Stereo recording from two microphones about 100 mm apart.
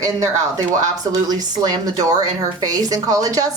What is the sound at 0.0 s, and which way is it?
A woman's voice, 35° right (ahead or behind).